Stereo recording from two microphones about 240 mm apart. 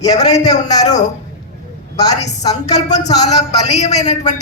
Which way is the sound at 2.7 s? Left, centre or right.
Left.